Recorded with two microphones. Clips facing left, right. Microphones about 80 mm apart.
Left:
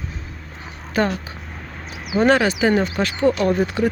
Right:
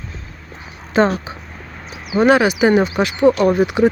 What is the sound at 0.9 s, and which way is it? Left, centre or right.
Speech, right.